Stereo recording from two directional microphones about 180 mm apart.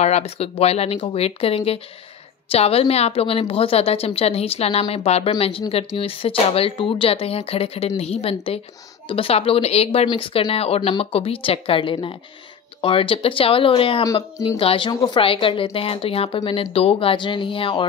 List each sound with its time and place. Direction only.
0.0 s speech: 35° left (ahead or behind)
14.0 s speech: 20° left (ahead or behind)
14.6 s speech: 30° left (ahead or behind)